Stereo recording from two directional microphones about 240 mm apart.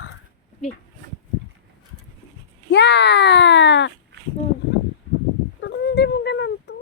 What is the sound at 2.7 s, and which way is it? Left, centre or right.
Speech, left.